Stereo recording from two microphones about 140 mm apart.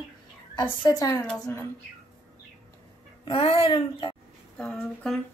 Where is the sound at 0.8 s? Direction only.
25° left (ahead or behind).